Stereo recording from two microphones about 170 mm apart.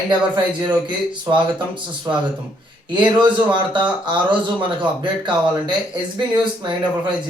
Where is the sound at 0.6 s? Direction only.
25° right (ahead or behind).